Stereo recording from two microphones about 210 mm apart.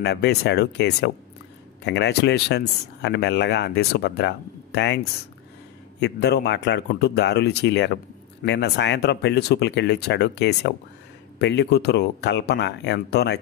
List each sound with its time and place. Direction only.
0.0 s speech: 55° left (ahead or behind)